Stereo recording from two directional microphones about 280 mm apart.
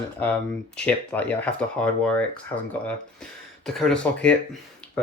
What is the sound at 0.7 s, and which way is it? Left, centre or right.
Speech, centre.